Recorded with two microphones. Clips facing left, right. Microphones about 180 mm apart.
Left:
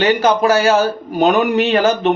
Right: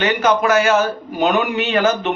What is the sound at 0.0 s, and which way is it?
Speech, 35° left (ahead or behind).